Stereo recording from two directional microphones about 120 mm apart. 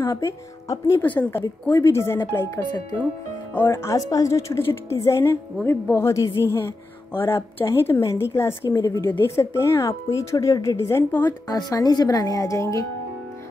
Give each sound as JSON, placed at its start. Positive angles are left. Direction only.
{"t": 0.0, "sound": "speech", "side_deg": 25}
{"t": 3.6, "sound": "speech", "side_deg": 30}
{"t": 11.4, "sound": "speech", "side_deg": 35}